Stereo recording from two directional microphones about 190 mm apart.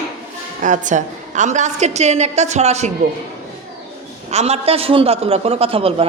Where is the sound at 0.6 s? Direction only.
40° right (ahead or behind).